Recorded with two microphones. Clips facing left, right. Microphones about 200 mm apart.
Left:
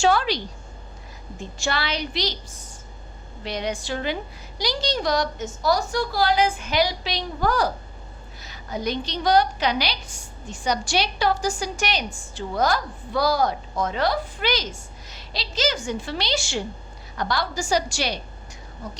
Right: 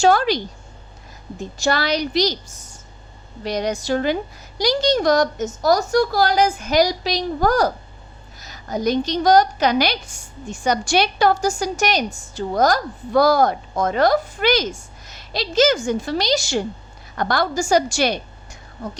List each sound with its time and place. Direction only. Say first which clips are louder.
0.0 s a woman's voice: right 4 dB; 45° right (ahead or behind)
1.5 s a woman's voice: right 7 dB; 40° right (ahead or behind)